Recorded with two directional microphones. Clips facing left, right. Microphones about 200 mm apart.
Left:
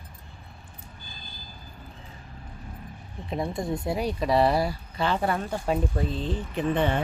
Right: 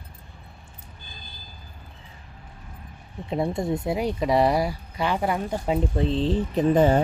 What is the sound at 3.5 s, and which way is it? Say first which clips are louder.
Speech: right 3 dB; 25° right (ahead or behind).